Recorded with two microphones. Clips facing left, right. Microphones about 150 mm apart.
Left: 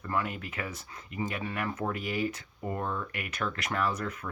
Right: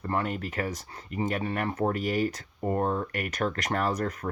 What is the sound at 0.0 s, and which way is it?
Speech, 40° right (ahead or behind).